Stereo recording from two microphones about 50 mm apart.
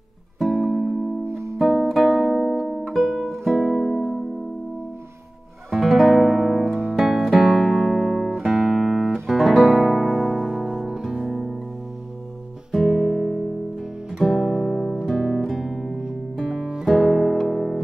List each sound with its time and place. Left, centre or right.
0.6 s music: centre
1.2 s music: right
1.6 s music: centre
5.7 s music: centre
12.7 s music: centre
16.6 s music: centre
16.9 s music: centre